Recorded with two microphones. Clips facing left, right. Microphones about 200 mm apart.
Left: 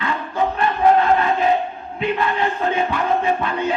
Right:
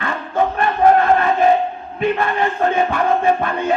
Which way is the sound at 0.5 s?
50° right (ahead or behind).